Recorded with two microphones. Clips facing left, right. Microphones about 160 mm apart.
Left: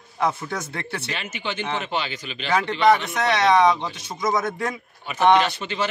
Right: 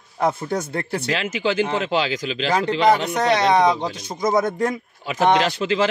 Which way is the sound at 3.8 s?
40° right (ahead or behind).